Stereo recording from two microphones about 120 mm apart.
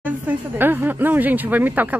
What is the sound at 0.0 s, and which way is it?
Speech, 15° right (ahead or behind).